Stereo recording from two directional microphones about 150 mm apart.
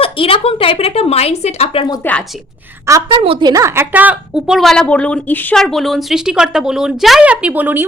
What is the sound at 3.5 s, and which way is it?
A woman's voice, 20° right (ahead or behind).